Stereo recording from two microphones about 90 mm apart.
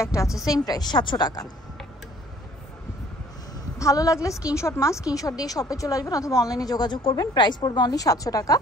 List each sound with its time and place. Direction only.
0.0 s a woman's voice: 35° left (ahead or behind)
0.5 s a woman's voice: 45° left (ahead or behind)
3.7 s a woman's voice: 40° left (ahead or behind)
7.0 s a woman's voice: 70° left (ahead or behind); by 8.5 s 40° left (ahead or behind)